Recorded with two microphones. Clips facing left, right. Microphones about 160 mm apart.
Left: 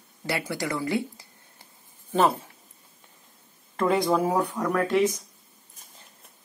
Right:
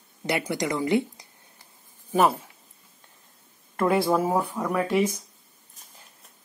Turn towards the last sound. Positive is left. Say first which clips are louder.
# left 1 dB
turn(degrees=-10)  # may be behind; listen again after turning